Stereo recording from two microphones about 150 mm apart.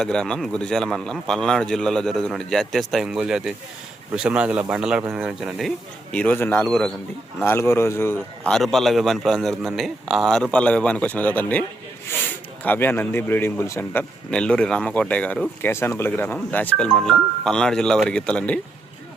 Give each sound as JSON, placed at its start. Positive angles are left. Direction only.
{"t": 0.0, "sound": "a man's voice", "side_deg": 5}
{"t": 6.1, "sound": "a man's voice", "side_deg": 10}
{"t": 7.3, "sound": "speech", "side_deg": 15}
{"t": 8.4, "sound": "a man's voice", "side_deg": 5}